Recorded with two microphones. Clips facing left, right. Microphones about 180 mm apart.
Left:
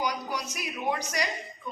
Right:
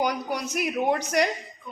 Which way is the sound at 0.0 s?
55° right (ahead or behind).